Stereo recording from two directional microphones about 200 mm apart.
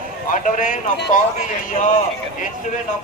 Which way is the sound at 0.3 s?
40° left (ahead or behind).